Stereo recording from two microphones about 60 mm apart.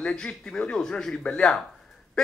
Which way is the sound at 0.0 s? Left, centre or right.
Centre.